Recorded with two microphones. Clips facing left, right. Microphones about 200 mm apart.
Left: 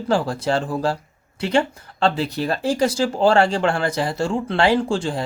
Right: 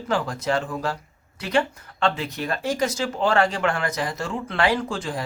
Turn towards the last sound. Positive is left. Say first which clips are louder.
# left 6 dB
turn(degrees=30)  # may be behind; listen again after turning